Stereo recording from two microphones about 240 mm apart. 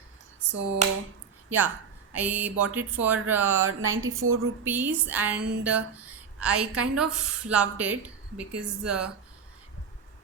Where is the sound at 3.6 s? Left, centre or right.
Right.